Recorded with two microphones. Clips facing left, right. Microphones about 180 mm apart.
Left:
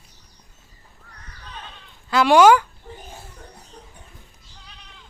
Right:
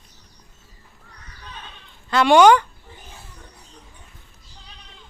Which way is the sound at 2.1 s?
Centre (ahead or behind).